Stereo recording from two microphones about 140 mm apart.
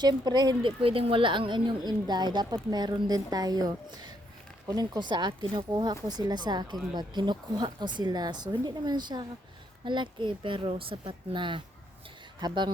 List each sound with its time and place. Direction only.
0.0 s a woman's voice: 30° right (ahead or behind)